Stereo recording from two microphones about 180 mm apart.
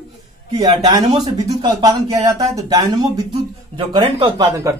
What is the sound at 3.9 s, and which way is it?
Speech, 30° right (ahead or behind).